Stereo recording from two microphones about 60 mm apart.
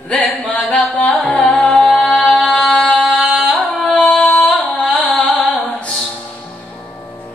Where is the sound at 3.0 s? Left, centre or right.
Left.